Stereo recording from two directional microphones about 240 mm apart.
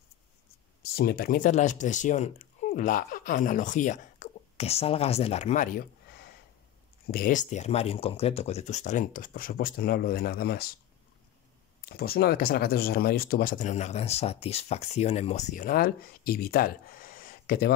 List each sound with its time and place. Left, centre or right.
0.8 s speech: left
11.8 s speech: left